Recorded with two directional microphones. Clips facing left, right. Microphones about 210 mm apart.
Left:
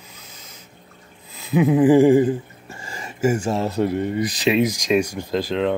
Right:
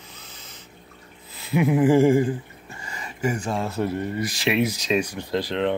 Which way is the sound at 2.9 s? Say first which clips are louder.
Left 6 dB; 45° left (ahead or behind).